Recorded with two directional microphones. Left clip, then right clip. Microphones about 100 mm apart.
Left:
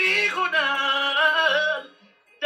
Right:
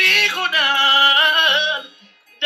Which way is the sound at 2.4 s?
15° right (ahead or behind).